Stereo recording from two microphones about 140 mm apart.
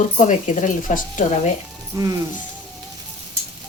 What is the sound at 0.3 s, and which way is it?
Speech, 65° left (ahead or behind).